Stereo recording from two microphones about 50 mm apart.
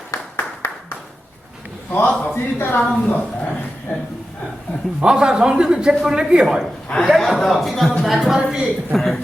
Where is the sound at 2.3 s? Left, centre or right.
Left.